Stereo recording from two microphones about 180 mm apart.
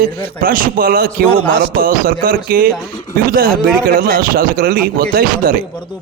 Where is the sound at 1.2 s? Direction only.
5° left (ahead or behind).